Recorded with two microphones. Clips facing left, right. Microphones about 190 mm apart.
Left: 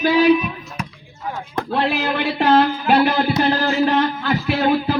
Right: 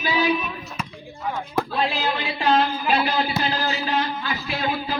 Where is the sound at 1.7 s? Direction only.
65° left (ahead or behind).